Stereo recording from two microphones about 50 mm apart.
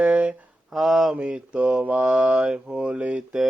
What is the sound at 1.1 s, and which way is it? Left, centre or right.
Mantra, right.